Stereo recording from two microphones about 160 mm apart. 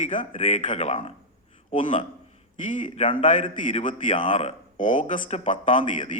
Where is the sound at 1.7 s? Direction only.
50° left (ahead or behind).